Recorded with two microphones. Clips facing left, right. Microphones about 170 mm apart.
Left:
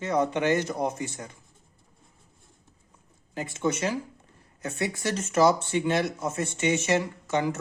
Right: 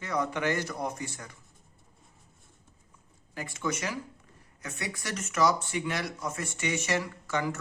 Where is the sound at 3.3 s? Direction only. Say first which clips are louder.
Left 5 dB; 20° left (ahead or behind).